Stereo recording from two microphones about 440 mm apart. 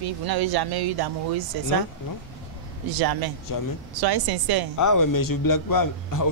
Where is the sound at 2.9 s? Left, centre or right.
Right.